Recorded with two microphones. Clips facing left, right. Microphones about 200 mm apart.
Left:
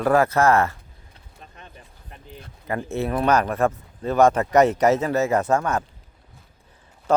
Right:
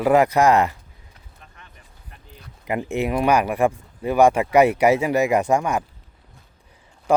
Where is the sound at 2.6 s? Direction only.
15° right (ahead or behind).